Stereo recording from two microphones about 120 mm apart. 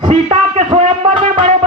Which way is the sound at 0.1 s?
55° right (ahead or behind).